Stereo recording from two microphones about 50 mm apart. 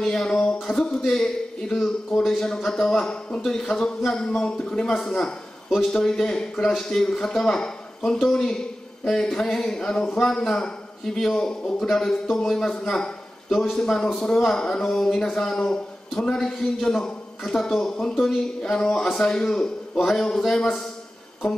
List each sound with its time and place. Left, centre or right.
0.0 s a man's voice: centre